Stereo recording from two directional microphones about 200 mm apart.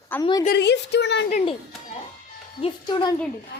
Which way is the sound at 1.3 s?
35° left (ahead or behind).